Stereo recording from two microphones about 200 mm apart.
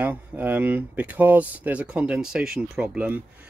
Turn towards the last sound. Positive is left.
turn(degrees=-5)  # may be behind; listen again after turning